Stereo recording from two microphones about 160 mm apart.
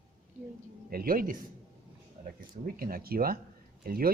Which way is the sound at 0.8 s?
65° right (ahead or behind).